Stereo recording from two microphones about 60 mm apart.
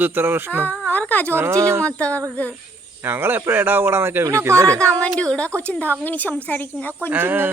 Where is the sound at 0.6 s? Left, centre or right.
Left.